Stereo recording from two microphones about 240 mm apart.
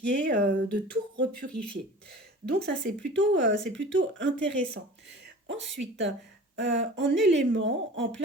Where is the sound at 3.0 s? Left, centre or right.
Right.